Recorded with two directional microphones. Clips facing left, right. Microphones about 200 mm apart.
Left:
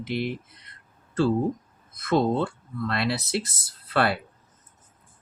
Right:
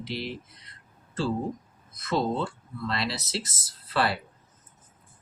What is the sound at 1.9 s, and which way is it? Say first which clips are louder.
Speech: left 5 dB; 55° left (ahead or behind).